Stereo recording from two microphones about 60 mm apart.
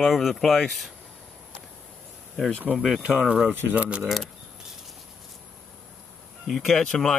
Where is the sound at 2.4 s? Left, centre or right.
Centre.